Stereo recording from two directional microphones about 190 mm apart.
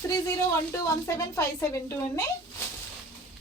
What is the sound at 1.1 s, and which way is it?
A woman's voice, 15° left (ahead or behind).